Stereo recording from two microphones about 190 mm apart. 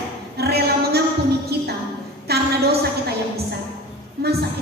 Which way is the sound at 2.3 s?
60° right (ahead or behind).